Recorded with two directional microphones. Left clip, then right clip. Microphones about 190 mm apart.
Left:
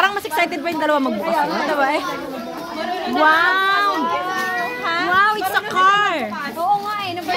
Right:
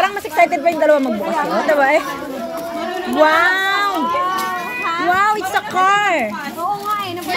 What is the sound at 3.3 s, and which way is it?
Speech, 10° right (ahead or behind).